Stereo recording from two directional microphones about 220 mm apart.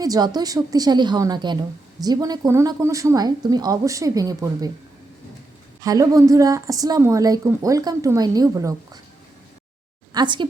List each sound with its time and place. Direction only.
0.0 s a woman's voice: 15° right (ahead or behind)
5.8 s a woman's voice: 15° right (ahead or behind)
10.1 s a woman's voice: 20° right (ahead or behind)